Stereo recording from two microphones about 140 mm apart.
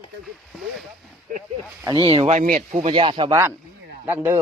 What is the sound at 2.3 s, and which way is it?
Speech, 75° right (ahead or behind).